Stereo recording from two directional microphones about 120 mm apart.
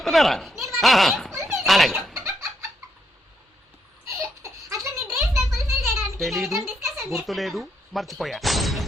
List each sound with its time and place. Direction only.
0.0 s speech: centre (ahead or behind)
1.3 s a sound: 25° right (ahead or behind)
1.6 s chicken: centre (ahead or behind)
2.2 s chicken: 25° right (ahead or behind)
4.0 s baby laughter: 25° right (ahead or behind)
5.6 s a sound: 25° right (ahead or behind)
6.1 s speech: centre (ahead or behind)
6.9 s a sound: 25° right (ahead or behind)
7.3 s speech: centre (ahead or behind)